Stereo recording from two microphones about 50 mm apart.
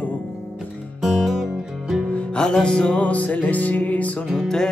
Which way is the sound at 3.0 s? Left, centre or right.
Left.